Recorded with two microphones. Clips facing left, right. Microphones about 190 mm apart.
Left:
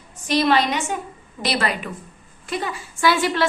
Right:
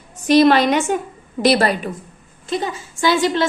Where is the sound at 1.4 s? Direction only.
40° right (ahead or behind).